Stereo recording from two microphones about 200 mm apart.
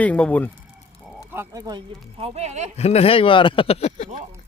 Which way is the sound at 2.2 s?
35° right (ahead or behind).